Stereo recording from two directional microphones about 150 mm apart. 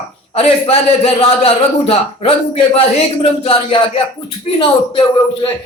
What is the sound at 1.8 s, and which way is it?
A man's voice, 40° left (ahead or behind).